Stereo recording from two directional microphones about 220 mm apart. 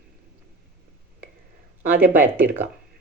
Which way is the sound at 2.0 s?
10° right (ahead or behind).